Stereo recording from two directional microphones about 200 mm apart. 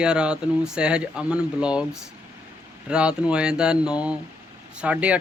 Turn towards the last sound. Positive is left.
turn(degrees=-5)  # may be behind; listen again after turning